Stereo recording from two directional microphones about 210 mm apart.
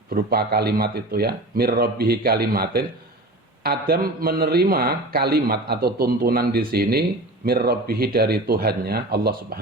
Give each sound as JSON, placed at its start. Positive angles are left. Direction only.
{"t": 0.1, "sound": "a man's voice", "side_deg": -45}